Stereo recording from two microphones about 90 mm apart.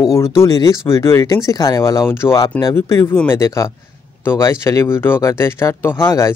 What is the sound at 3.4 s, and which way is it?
Speech, 40° left (ahead or behind).